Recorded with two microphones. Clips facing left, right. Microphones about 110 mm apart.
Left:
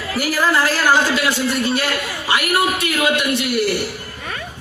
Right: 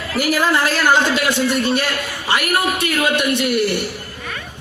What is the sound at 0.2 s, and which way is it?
A man's voice, 20° right (ahead or behind).